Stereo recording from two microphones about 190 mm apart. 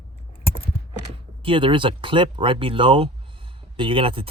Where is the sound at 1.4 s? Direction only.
25° right (ahead or behind).